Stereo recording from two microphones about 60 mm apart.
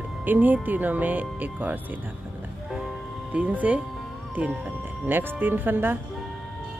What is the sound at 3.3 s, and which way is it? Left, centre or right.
Speech, right.